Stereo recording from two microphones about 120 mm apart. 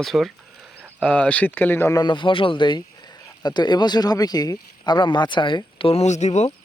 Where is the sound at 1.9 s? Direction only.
40° left (ahead or behind); by 6.5 s 75° left (ahead or behind).